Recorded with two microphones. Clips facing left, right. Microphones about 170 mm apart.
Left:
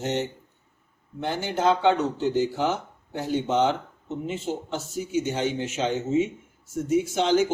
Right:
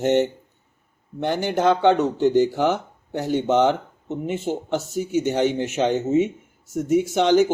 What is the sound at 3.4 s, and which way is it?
Speech, 60° right (ahead or behind).